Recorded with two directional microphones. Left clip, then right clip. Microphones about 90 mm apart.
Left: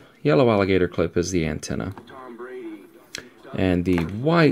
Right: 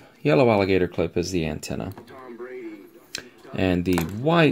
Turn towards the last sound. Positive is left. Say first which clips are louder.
# left 1 dB
turn(degrees=20)  # may be behind; listen again after turning